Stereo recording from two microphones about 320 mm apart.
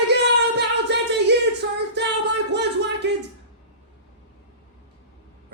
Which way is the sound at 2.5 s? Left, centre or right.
Right.